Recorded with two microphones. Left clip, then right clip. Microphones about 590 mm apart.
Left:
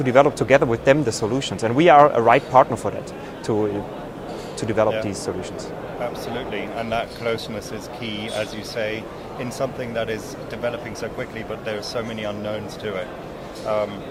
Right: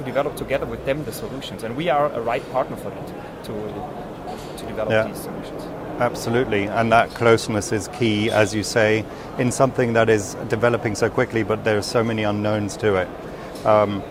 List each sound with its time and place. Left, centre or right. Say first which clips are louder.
0.0 s speech: left 7 dB; left
4.8 s speech: left 5 dB; left
6.0 s speech: right 8 dB; right